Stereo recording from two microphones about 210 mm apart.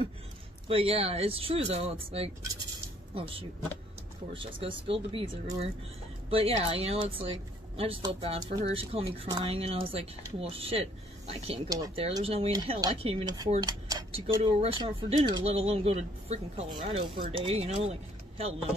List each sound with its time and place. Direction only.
0.7 s speech: 25° right (ahead or behind)
4.3 s speech: 25° right (ahead or behind)